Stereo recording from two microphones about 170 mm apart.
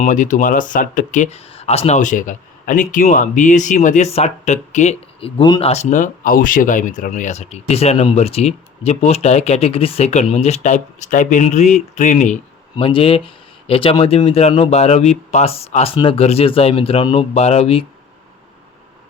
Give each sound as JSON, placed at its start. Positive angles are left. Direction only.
{"t": 0.0, "sound": "speech", "side_deg": 50}
{"t": 5.4, "sound": "speech", "side_deg": 30}
{"t": 12.7, "sound": "speech", "side_deg": 30}